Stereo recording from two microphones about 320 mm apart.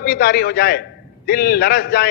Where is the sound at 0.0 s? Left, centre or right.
Left.